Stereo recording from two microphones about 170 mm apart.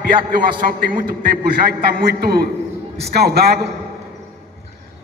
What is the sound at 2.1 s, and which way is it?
A man's voice, 65° right (ahead or behind).